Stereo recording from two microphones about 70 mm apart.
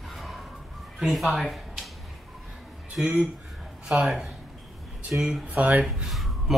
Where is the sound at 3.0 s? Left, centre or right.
Centre.